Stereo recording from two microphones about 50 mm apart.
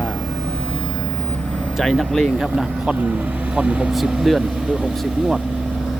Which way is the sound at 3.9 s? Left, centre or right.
Centre.